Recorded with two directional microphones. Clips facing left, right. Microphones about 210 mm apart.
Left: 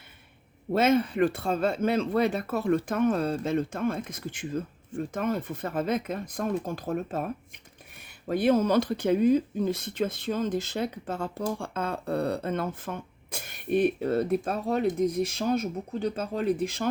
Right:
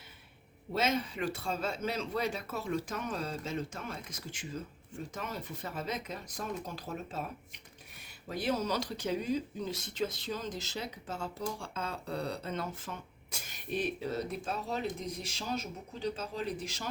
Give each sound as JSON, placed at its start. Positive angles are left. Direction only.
{"t": 0.7, "sound": "speech", "side_deg": 55}
{"t": 8.3, "sound": "speech", "side_deg": 55}